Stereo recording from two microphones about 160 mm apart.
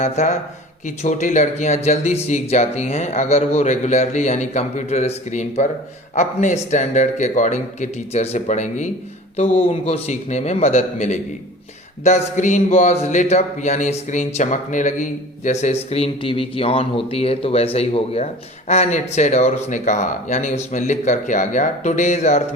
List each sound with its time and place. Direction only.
0.0 s a man's voice: 50° left (ahead or behind)